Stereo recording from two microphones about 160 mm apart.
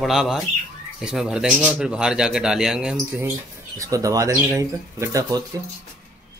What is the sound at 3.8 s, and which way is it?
Speech, 20° right (ahead or behind).